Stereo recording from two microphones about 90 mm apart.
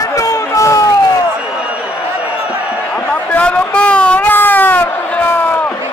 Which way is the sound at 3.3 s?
15° left (ahead or behind).